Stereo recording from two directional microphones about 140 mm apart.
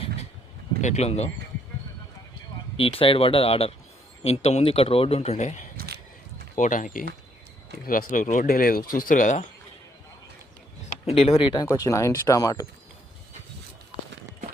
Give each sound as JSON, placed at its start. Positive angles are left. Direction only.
{"t": 0.8, "sound": "speech", "side_deg": 55}
{"t": 2.7, "sound": "speech", "side_deg": 40}
{"t": 6.6, "sound": "speech", "side_deg": 65}
{"t": 11.0, "sound": "speech", "side_deg": 45}
{"t": 11.5, "sound": "speech", "side_deg": 25}